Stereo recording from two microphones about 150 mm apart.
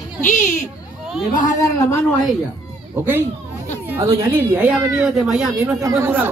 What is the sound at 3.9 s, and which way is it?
Speech, 20° right (ahead or behind).